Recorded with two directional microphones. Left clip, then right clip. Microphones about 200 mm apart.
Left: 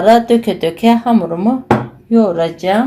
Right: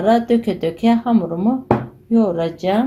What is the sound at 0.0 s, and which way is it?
Speech, centre (ahead or behind).